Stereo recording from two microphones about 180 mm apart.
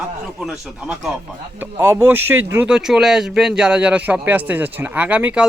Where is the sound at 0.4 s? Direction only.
5° right (ahead or behind).